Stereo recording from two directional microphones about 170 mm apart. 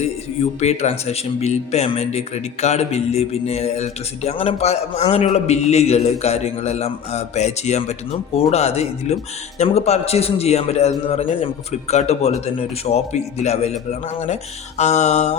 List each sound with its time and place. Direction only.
0.6 s a man's voice: 40° left (ahead or behind)
14.8 s a man's voice: 40° left (ahead or behind)